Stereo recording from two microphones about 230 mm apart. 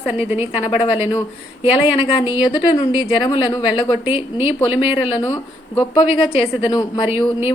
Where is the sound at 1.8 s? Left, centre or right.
Left.